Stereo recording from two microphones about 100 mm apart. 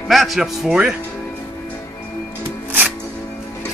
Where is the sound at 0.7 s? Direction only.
10° right (ahead or behind).